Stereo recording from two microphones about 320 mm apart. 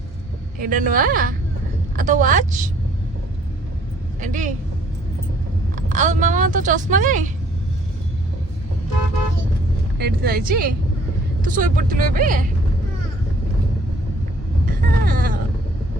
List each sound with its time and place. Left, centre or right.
0.6 s speech: right
4.2 s speech: right
5.7 s speech: right
10.0 s speech: right
14.8 s a sound: right